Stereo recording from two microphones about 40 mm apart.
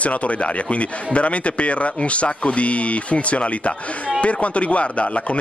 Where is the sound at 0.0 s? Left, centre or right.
Left.